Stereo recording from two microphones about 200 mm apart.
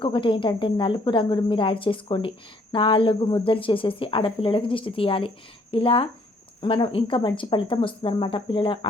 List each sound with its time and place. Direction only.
0.0 s speech: 25° left (ahead or behind)